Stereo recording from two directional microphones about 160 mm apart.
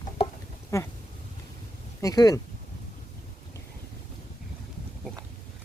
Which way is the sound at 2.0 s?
20° left (ahead or behind).